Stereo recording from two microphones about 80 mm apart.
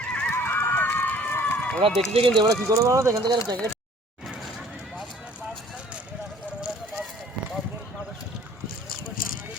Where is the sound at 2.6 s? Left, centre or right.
Right.